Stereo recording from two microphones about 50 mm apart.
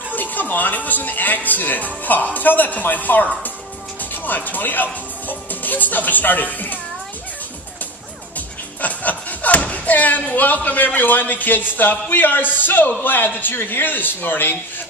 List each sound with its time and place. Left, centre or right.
0.1 s speech: left
8.4 s speech: left